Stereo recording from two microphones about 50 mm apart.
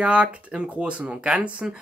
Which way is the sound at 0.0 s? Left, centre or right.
Right.